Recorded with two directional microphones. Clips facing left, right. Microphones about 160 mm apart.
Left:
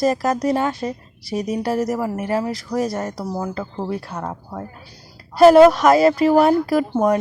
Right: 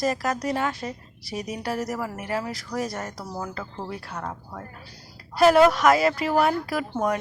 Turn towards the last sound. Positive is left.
turn(degrees=30)  # may be behind; listen again after turning